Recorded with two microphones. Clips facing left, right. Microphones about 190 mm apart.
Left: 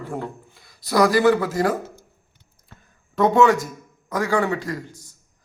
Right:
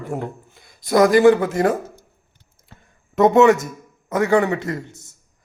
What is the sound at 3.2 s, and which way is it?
A man's voice, 20° right (ahead or behind).